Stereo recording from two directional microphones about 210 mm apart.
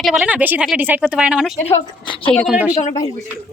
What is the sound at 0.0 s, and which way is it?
Speech, 5° right (ahead or behind).